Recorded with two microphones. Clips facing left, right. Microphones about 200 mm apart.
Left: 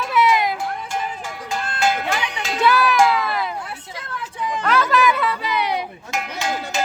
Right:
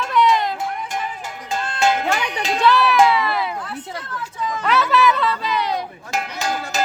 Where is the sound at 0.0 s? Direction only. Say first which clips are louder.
Even; 5° left (ahead or behind).